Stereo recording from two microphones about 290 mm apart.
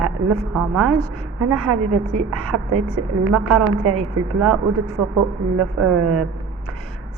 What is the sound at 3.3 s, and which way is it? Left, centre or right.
A woman's voice, centre.